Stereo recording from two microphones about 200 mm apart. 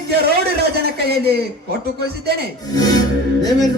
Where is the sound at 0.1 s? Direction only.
50° right (ahead or behind).